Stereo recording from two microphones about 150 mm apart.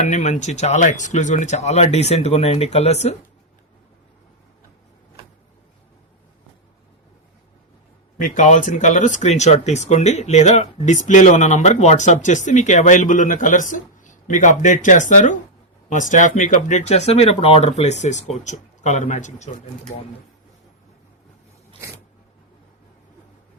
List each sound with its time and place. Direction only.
0.0 s speech: 50° left (ahead or behind)
8.2 s speech: 55° left (ahead or behind)